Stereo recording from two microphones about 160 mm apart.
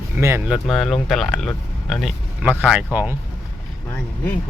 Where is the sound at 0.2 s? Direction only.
15° right (ahead or behind).